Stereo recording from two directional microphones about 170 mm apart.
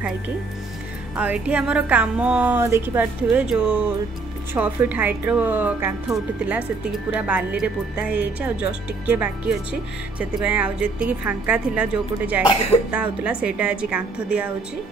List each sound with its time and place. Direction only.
1.1 s speech: 10° right (ahead or behind)
7.2 s speech: 10° right (ahead or behind)